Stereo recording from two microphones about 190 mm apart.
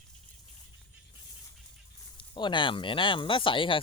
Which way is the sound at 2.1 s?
25° left (ahead or behind).